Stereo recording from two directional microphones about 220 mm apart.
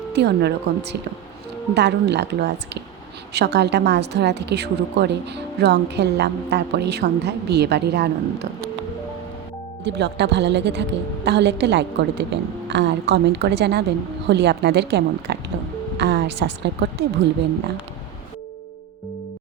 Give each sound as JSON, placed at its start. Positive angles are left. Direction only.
{"t": 0.1, "sound": "a woman's voice", "side_deg": -50}
{"t": 9.8, "sound": "a woman's voice", "side_deg": -50}